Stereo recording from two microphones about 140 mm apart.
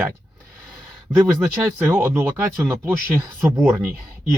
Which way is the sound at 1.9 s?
15° right (ahead or behind).